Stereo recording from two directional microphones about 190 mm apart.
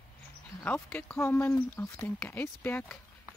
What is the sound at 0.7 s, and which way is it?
Speech, 10° left (ahead or behind).